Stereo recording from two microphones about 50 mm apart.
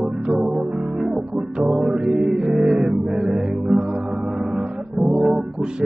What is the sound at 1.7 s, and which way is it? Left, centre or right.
Music, right.